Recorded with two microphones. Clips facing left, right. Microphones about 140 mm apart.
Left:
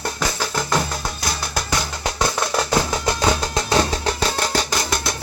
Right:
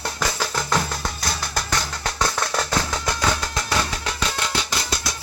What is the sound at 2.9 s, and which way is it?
Music, 25° left (ahead or behind).